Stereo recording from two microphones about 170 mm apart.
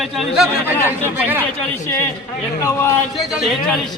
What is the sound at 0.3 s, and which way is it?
Speech, 5° right (ahead or behind).